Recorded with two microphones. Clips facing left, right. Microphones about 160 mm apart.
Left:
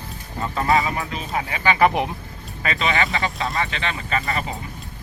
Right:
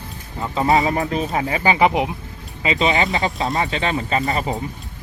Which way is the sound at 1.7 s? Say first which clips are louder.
Left 1 dB; 15° right (ahead or behind).